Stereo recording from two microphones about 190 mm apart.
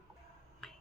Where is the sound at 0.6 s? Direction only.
5° left (ahead or behind).